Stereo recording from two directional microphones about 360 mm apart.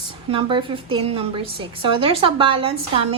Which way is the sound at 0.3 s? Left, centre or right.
Centre.